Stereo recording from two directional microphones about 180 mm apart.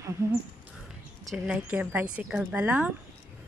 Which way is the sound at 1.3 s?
5° right (ahead or behind).